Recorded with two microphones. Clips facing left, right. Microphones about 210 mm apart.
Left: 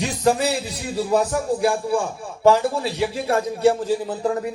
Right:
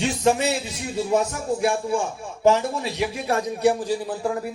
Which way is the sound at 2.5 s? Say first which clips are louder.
Left 3 dB; 30° left (ahead or behind).